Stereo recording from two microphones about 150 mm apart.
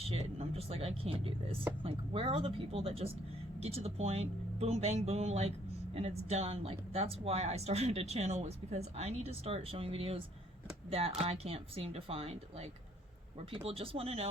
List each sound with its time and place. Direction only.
0.0 s speech: 45° right (ahead or behind)